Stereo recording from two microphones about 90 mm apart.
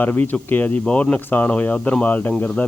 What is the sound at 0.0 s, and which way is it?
Speech, 20° left (ahead or behind).